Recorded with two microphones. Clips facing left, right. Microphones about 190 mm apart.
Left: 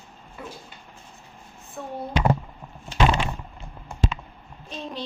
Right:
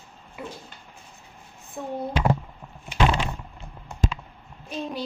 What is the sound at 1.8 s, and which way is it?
Speech, 20° right (ahead or behind).